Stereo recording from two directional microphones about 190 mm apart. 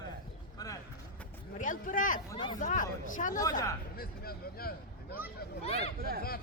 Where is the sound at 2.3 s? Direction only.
25° left (ahead or behind).